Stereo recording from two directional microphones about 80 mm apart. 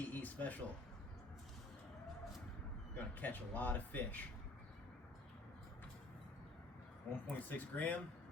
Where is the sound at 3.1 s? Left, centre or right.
Left.